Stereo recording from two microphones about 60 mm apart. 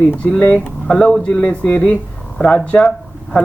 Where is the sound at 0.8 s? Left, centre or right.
Centre.